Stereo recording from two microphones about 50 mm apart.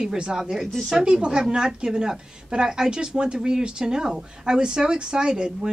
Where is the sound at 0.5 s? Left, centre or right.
Centre.